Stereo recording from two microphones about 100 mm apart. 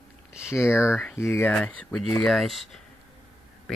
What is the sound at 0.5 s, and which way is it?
Speech, 25° left (ahead or behind).